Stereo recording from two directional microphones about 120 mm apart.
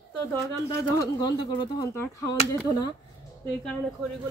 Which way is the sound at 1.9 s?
20° left (ahead or behind).